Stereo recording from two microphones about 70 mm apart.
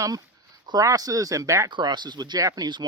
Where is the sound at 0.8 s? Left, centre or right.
Right.